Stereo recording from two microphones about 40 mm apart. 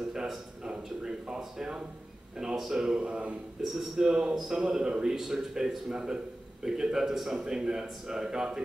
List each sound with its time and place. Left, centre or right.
0.7 s speech: right
3.0 s a man's voice: right
3.6 s a man's voice: centre
3.9 s a man's voice: centre